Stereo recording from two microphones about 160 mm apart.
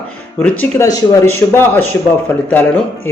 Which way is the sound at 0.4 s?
10° left (ahead or behind).